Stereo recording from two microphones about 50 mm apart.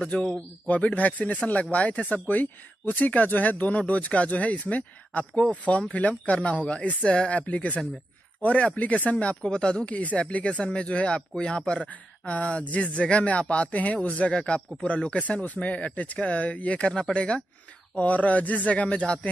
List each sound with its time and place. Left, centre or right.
0.1 s speech: left